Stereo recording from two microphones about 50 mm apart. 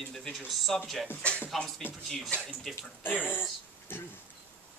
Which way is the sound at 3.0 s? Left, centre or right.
Left.